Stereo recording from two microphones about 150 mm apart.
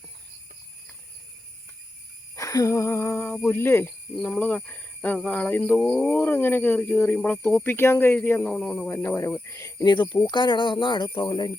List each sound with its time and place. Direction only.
2.3 s speech: 20° left (ahead or behind); by 8.9 s 5° left (ahead or behind)
8.9 s speech: 15° left (ahead or behind)